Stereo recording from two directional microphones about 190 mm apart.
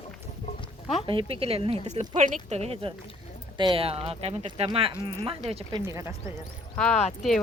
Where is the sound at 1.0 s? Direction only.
30° right (ahead or behind).